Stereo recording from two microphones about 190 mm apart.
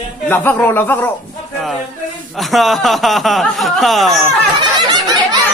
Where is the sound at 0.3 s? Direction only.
10° left (ahead or behind).